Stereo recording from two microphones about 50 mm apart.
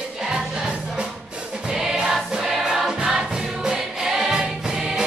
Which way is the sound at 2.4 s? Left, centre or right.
Centre.